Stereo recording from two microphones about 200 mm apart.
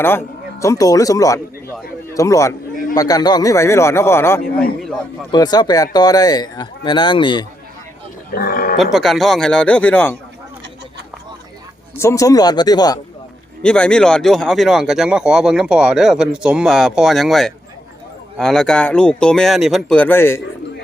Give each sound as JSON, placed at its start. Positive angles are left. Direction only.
{"t": 0.0, "sound": "a man's voice", "side_deg": 10}
{"t": 8.4, "sound": "speech", "side_deg": 45}
{"t": 8.8, "sound": "speech", "side_deg": 0}
{"t": 11.9, "sound": "speech", "side_deg": 15}
{"t": 13.6, "sound": "speech", "side_deg": 5}